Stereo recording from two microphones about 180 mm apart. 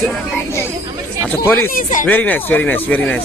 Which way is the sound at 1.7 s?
45° left (ahead or behind).